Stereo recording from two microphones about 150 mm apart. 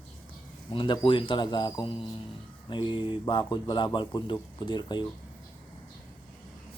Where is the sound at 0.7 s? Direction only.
35° left (ahead or behind).